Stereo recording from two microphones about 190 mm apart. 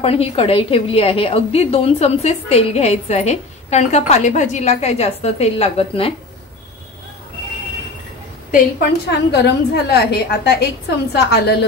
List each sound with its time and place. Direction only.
0.0 s a woman's voice: 30° left (ahead or behind)
8.5 s a woman's voice: 50° left (ahead or behind)